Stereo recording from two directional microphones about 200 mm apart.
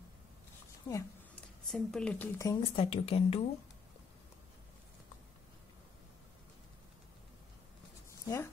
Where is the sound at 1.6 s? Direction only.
Centre (ahead or behind).